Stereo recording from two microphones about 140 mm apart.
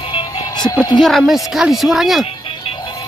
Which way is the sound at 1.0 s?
Centre (ahead or behind).